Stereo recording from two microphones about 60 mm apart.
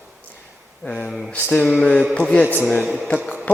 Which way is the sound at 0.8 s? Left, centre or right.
Left.